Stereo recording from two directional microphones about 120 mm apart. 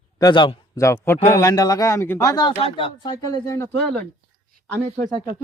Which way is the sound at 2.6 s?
55° left (ahead or behind).